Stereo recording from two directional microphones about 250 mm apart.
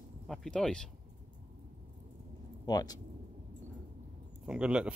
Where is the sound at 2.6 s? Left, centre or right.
Centre.